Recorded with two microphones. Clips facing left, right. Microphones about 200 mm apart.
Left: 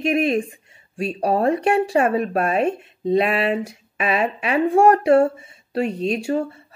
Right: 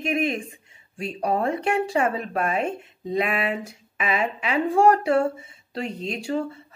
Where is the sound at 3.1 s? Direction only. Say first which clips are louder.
Left 6 dB; 30° left (ahead or behind).